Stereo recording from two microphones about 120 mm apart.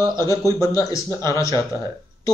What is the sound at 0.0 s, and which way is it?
Speech, 25° left (ahead or behind).